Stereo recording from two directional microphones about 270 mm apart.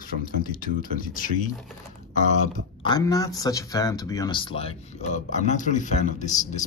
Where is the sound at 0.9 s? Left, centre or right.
Left.